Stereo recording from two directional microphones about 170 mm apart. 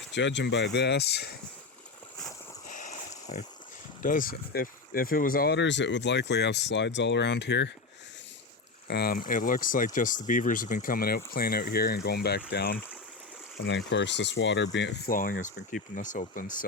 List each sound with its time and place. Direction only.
0.1 s speech: 90° left
2.6 s a sound: 50° left (ahead or behind)
4.0 s speech: 55° left (ahead or behind); by 7.7 s 90° left
8.9 s speech: 65° left (ahead or behind)
13.7 s speech: 90° left
15.1 s speech: 55° left (ahead or behind)